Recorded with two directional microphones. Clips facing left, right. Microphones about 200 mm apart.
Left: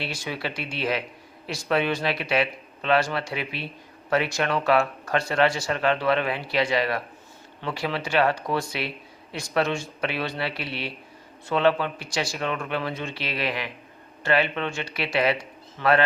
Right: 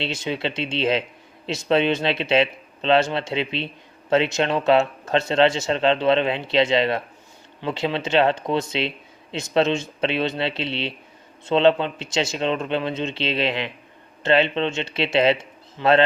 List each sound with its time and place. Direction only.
0.0 s speech: 25° right (ahead or behind)